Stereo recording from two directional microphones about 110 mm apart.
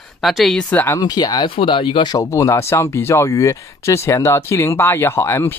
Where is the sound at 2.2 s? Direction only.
30° left (ahead or behind).